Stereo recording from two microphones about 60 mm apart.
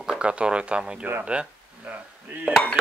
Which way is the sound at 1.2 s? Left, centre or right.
Right.